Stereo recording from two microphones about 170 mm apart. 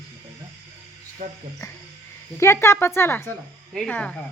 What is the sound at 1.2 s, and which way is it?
Speech, 40° right (ahead or behind).